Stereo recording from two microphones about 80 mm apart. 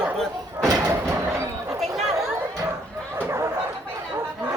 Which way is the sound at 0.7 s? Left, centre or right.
Right.